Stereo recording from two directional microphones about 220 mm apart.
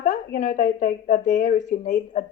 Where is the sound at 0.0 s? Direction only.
35° left (ahead or behind).